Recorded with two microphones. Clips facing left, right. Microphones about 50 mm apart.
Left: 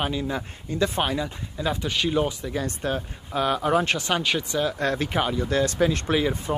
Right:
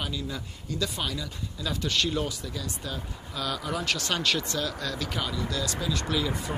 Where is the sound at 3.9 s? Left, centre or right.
Centre.